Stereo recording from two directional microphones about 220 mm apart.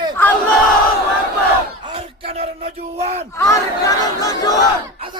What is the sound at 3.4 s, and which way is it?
Speech, 15° left (ahead or behind).